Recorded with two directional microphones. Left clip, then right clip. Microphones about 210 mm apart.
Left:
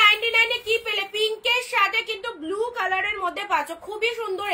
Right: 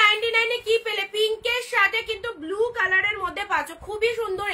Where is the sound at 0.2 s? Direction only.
20° right (ahead or behind).